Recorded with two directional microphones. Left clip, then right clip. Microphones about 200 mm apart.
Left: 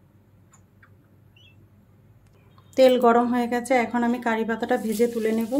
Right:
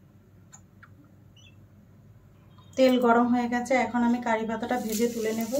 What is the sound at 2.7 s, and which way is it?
A woman's voice, 45° left (ahead or behind).